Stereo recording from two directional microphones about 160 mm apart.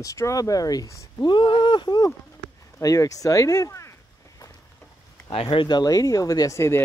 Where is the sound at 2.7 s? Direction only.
20° left (ahead or behind).